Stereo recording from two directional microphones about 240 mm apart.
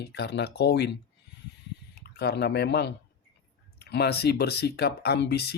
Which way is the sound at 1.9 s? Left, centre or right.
Left.